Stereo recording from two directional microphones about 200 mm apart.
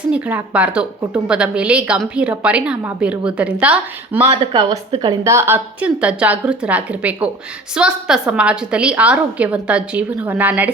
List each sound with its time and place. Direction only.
0.1 s a woman's voice: 5° right (ahead or behind)
4.2 s speech: 30° right (ahead or behind)
5.2 s a woman's voice: 15° right (ahead or behind)